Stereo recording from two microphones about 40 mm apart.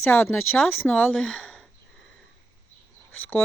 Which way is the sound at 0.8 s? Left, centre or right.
Left.